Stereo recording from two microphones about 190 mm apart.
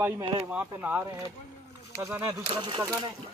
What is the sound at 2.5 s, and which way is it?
Speech, 25° right (ahead or behind).